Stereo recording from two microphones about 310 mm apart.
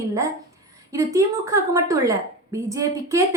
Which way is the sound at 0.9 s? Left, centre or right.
Centre.